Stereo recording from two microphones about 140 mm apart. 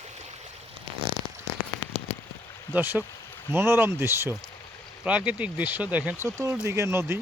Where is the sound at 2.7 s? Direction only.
15° right (ahead or behind).